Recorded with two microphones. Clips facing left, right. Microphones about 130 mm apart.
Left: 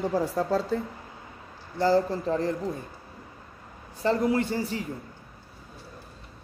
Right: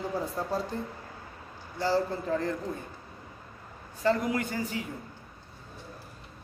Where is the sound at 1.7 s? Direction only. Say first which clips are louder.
Left 5 dB; 45° left (ahead or behind).